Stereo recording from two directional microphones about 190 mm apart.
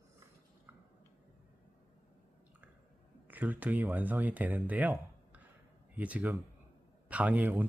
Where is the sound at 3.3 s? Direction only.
10° right (ahead or behind).